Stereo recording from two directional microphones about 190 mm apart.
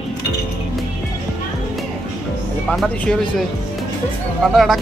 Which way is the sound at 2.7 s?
5° left (ahead or behind).